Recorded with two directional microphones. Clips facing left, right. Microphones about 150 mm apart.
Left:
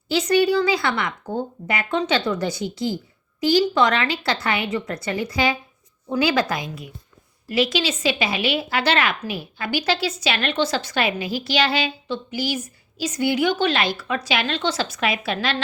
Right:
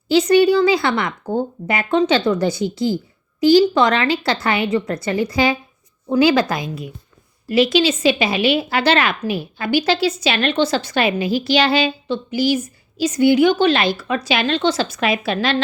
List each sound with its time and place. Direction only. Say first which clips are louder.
0.1 s a woman's voice: right 5 dB; 25° right (ahead or behind)